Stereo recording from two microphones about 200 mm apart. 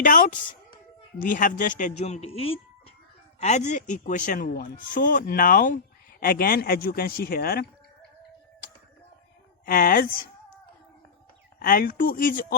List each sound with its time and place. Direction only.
0.0 s speech: 40° left (ahead or behind)
9.6 s speech: 45° left (ahead or behind)
11.6 s speech: 45° left (ahead or behind)